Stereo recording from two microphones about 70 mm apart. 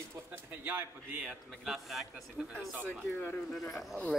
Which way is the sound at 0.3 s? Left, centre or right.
Right.